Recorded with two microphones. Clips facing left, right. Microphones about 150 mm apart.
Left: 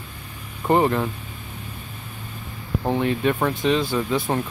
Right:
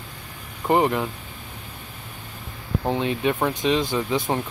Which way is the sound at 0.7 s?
5° right (ahead or behind).